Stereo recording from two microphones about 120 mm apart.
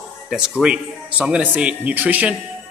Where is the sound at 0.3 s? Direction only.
5° right (ahead or behind).